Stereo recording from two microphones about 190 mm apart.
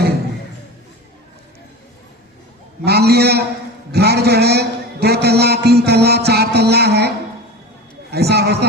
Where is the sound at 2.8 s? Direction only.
55° right (ahead or behind).